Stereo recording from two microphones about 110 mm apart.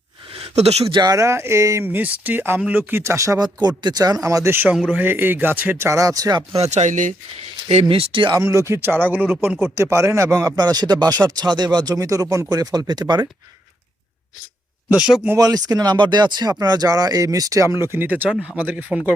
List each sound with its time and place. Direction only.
0.3 s a sound: 70° right (ahead or behind)
0.9 s speech: 45° right (ahead or behind)
1.1 s speech: 25° right (ahead or behind)
3.0 s speech: 25° right (ahead or behind)
4.9 s speech: 15° right (ahead or behind); by 6.6 s 35° right (ahead or behind)
6.6 s speech: 90° right
7.7 s speech: 65° right (ahead or behind)
8.4 s speech: 25° right (ahead or behind)
10.6 s speech: 40° right (ahead or behind)
14.8 s a man's voice: 5° right (ahead or behind)
15.4 s speech: 35° right (ahead or behind)
17.9 s speech: 15° right (ahead or behind)